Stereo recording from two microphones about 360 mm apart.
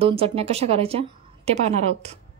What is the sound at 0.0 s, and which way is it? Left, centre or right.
A woman's voice, centre.